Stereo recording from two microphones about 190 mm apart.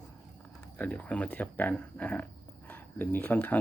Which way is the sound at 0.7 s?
10° left (ahead or behind).